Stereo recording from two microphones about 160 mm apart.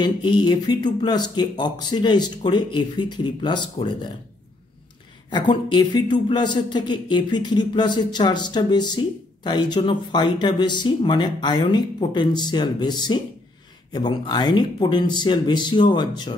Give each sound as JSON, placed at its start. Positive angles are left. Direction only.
{"t": 0.0, "sound": "speech", "side_deg": 30}
{"t": 5.3, "sound": "speech", "side_deg": 30}